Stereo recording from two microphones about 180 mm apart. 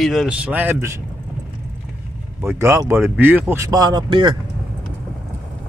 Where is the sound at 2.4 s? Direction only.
15° right (ahead or behind).